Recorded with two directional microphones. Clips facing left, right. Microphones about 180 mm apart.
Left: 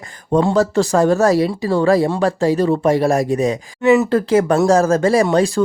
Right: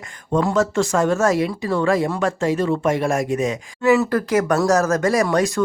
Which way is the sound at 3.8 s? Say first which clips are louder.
Left 3 dB; 20° left (ahead or behind).